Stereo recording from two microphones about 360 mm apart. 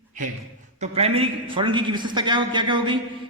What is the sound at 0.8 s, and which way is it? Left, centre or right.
A man's voice, centre.